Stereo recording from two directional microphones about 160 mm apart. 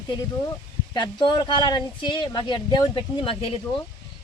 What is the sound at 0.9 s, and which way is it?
Speech, 25° left (ahead or behind).